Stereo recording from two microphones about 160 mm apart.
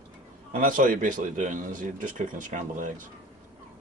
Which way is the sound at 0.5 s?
55° right (ahead or behind).